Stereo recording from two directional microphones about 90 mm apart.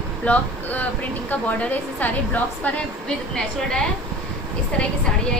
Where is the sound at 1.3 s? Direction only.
20° left (ahead or behind).